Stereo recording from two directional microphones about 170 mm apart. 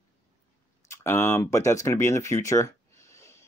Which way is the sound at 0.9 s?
15° left (ahead or behind).